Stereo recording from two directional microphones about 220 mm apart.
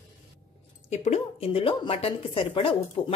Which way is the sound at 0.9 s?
30° left (ahead or behind).